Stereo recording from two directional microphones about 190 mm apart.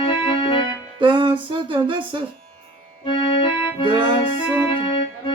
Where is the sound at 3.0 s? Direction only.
25° left (ahead or behind).